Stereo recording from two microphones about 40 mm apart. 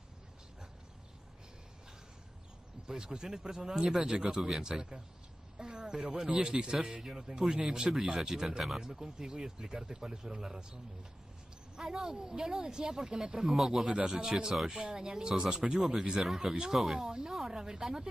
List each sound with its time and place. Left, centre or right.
2.8 s speech: centre
5.5 s a sound: centre
6.4 s speech: centre
11.8 s speech: centre
14.5 s speech: centre
14.8 s speech: right
16.2 s speech: centre